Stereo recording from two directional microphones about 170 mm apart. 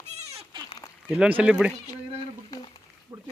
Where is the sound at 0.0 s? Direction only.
40° right (ahead or behind).